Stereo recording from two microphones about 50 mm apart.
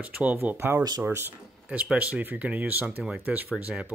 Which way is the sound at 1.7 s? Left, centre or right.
Right.